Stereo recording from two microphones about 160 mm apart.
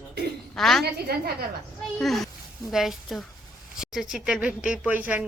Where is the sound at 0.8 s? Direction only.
85° right.